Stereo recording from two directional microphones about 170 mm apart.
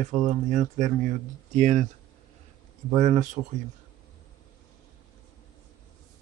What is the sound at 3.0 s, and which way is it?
Speech, 45° right (ahead or behind).